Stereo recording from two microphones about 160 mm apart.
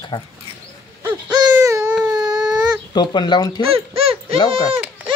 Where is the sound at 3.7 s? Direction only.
40° right (ahead or behind).